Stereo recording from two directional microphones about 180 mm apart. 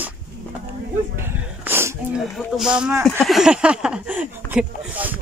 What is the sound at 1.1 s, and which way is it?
Sneeze, 10° right (ahead or behind).